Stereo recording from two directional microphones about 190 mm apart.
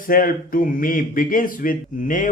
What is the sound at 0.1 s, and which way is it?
Speech, 50° left (ahead or behind).